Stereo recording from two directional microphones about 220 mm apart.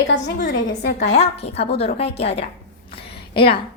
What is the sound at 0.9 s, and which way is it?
A woman's voice, 30° left (ahead or behind).